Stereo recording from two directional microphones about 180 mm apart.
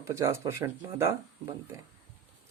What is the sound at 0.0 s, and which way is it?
Speech, 15° right (ahead or behind).